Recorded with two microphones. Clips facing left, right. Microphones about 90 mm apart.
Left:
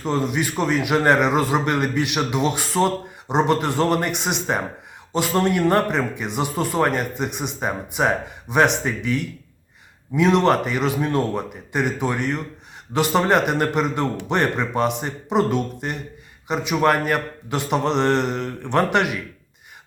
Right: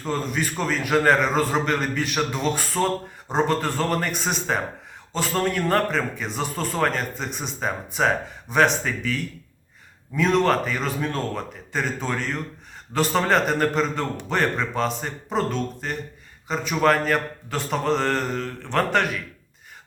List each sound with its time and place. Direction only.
0.0 s a man's voice: 15° left (ahead or behind)
10.2 s a man's voice: 15° left (ahead or behind)